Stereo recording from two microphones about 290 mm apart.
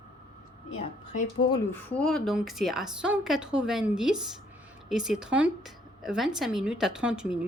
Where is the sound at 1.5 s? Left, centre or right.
Centre.